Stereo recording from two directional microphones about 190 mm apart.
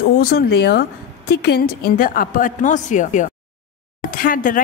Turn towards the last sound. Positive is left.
turn(degrees=45)  # may be behind; listen again after turning